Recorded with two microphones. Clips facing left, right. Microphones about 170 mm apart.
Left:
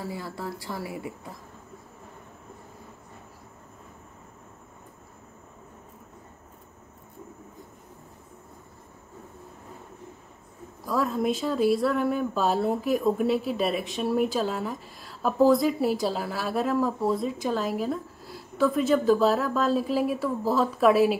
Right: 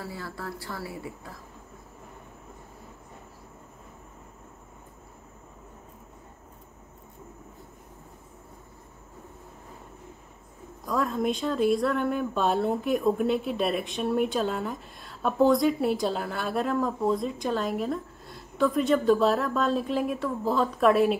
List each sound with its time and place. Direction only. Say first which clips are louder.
0.0 s speech: left 3 dB; 15° left (ahead or behind)
10.9 s speech: left 1 dB; centre (ahead or behind)